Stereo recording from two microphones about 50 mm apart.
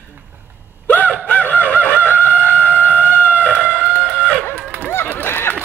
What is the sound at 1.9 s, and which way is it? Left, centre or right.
Chicken, left.